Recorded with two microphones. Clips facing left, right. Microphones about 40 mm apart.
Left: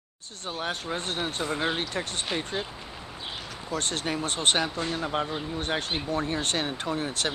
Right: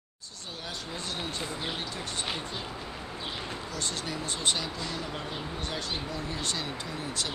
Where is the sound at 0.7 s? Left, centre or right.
Left.